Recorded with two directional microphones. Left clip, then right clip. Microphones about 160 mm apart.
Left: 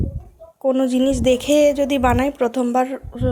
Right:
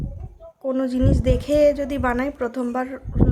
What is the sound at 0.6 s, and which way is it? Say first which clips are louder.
A woman's voice: left 5 dB; 15° left (ahead or behind).